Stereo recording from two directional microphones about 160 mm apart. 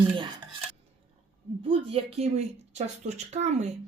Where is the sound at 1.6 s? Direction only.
35° right (ahead or behind).